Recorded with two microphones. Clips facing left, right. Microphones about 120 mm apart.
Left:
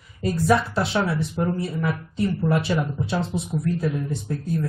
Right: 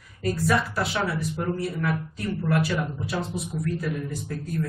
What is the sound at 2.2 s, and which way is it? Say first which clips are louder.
A man's voice: left 4 dB; 25° left (ahead or behind).